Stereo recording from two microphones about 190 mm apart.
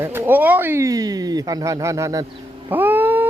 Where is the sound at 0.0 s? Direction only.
10° right (ahead or behind).